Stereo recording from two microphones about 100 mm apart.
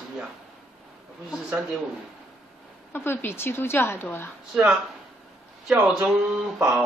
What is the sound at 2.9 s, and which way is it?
A woman's voice, 20° left (ahead or behind).